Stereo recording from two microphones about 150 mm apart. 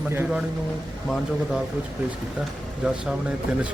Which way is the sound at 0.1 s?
10° right (ahead or behind).